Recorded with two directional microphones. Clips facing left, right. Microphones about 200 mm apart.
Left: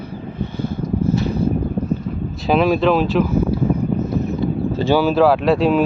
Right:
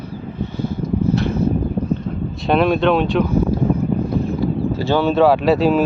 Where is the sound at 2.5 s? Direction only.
Centre (ahead or behind).